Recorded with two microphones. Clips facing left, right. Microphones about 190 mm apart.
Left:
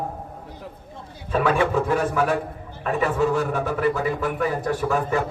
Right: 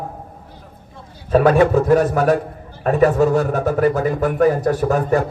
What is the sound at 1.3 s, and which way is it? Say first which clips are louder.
A man's voice: right 8 dB; 40° right (ahead or behind).